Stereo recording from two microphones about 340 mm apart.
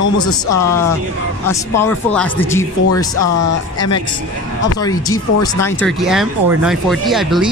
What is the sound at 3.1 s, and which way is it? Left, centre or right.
Speech, left.